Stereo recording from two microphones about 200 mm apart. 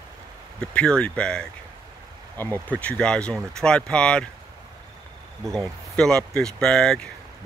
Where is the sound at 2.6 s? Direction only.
5° left (ahead or behind).